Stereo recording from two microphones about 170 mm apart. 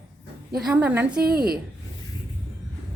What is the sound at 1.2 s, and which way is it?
Speech, 65° right (ahead or behind).